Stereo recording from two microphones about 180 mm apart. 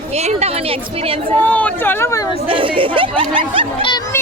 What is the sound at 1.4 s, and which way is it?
Speech, 10° left (ahead or behind).